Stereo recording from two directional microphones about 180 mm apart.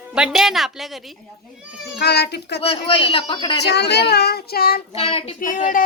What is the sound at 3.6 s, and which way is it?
Speech, 70° left (ahead or behind).